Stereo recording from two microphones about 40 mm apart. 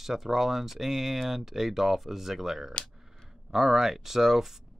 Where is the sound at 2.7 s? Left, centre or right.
Left.